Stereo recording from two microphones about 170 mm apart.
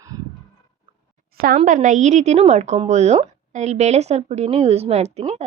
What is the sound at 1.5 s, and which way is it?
A woman's voice, 50° right (ahead or behind).